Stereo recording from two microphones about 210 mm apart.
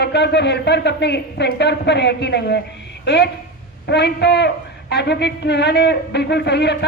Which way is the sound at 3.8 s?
55° left (ahead or behind).